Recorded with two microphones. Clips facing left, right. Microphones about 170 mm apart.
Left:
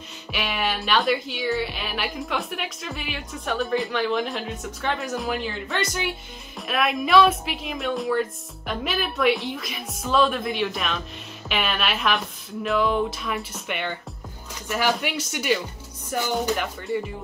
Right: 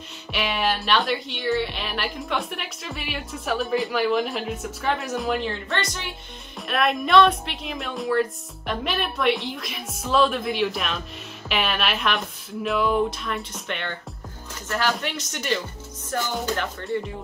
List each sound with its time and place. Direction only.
0.3 s speech: centre (ahead or behind)